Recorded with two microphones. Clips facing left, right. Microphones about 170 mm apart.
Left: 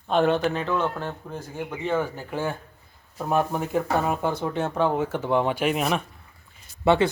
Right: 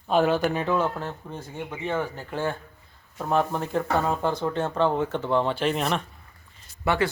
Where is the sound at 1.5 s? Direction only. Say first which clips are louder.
Left 3 dB; centre (ahead or behind).